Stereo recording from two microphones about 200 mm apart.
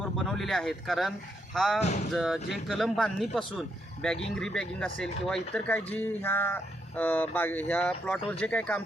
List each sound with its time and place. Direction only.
0.3 s speech: centre (ahead or behind)
1.8 s speech: 35° left (ahead or behind)
2.1 s speech: centre (ahead or behind)